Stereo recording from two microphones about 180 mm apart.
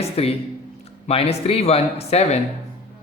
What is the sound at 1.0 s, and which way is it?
Speech, 35° left (ahead or behind).